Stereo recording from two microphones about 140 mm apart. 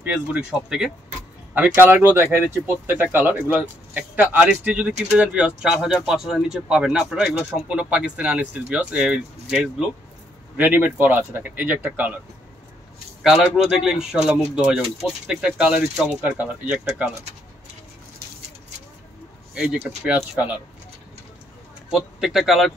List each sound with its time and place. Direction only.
0.0 s speech: 10° right (ahead or behind)
1.8 s speech: 15° right (ahead or behind)
13.2 s speech: centre (ahead or behind)
19.5 s speech: 5° right (ahead or behind)
21.9 s speech: centre (ahead or behind)